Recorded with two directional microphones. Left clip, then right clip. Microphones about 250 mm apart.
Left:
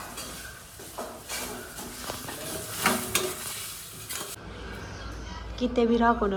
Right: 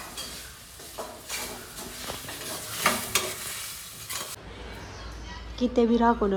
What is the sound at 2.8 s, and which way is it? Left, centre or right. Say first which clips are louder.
Stir: right 1 dB; centre.